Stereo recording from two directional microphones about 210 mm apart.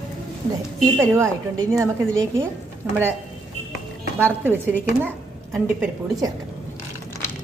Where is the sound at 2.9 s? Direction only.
Centre (ahead or behind).